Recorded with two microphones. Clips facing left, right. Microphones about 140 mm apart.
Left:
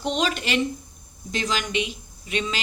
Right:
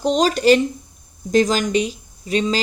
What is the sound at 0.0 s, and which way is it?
A woman's voice, 40° right (ahead or behind).